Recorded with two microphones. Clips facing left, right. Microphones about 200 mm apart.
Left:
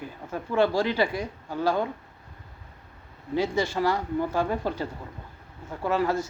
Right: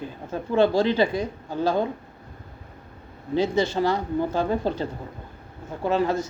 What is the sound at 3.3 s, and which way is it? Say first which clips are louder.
Speech: right 3 dB; 20° right (ahead or behind).